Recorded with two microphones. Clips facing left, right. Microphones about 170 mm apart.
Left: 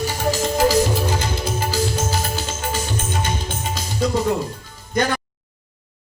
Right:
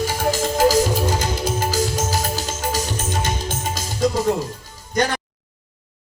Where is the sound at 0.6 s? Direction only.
45° right (ahead or behind).